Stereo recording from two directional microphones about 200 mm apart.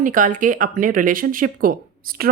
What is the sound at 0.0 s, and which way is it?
Speech, 40° right (ahead or behind).